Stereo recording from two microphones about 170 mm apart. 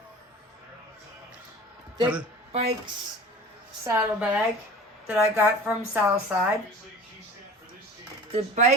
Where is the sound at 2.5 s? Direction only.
40° right (ahead or behind).